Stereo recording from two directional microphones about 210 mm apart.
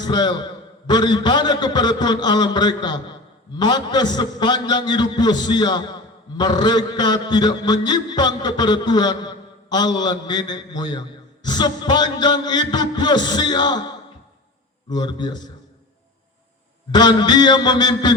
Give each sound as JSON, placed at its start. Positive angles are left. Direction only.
{"t": 0.0, "sound": "a man's voice", "side_deg": 20}
{"t": 14.8, "sound": "a man's voice", "side_deg": 20}
{"t": 16.9, "sound": "a man's voice", "side_deg": 20}